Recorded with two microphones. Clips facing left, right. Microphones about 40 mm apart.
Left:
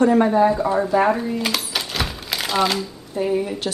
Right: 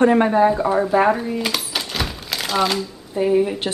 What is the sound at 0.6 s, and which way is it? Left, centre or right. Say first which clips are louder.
Speech: right 1 dB; centre.